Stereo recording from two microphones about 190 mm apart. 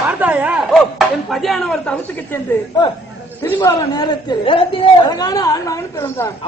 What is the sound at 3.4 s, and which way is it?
A man's voice, 20° left (ahead or behind).